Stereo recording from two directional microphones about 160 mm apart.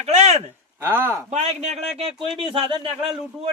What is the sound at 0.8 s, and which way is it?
Speech, 15° right (ahead or behind).